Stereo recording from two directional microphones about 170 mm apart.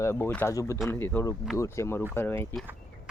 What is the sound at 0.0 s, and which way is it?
Speech, 15° left (ahead or behind).